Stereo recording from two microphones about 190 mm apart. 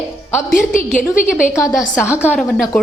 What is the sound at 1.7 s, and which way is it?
Speech, 5° right (ahead or behind).